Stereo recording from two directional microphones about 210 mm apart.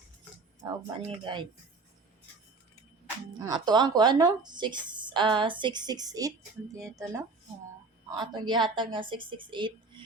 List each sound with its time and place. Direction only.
0.9 s a woman's voice: 20° right (ahead or behind)
3.4 s a woman's voice: 20° right (ahead or behind)